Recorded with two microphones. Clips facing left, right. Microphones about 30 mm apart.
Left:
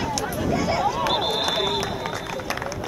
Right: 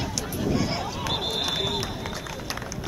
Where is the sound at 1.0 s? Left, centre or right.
Centre.